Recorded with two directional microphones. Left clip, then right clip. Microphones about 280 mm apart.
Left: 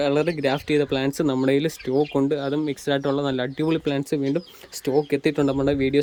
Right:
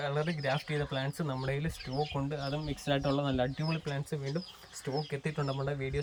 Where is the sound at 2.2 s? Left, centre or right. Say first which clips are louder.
Left 14 dB; left.